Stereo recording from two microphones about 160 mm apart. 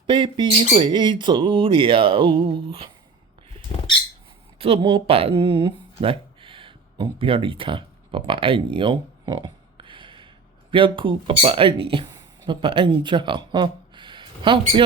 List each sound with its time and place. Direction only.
0.1 s speech: 35° right (ahead or behind)
4.5 s speech: 35° right (ahead or behind)